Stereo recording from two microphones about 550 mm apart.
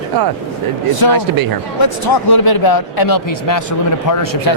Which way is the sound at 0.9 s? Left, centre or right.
Left.